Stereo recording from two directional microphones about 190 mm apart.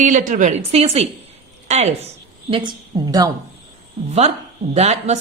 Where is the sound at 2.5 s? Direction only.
25° right (ahead or behind).